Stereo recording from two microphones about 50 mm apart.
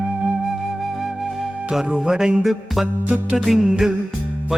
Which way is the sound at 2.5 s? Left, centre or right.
Centre.